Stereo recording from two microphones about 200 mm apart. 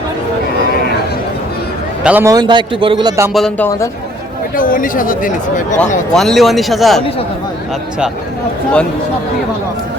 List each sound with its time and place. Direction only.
2.0 s a man's voice: 10° right (ahead or behind)
3.3 s a man's voice: centre (ahead or behind)
4.5 s speech: 45° left (ahead or behind)
6.1 s a man's voice: centre (ahead or behind)